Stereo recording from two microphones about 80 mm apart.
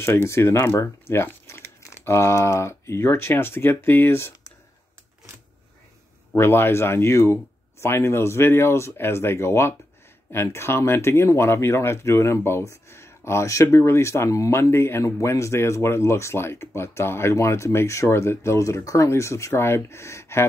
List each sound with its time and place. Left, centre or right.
0.0 s speech: left
6.3 s speech: left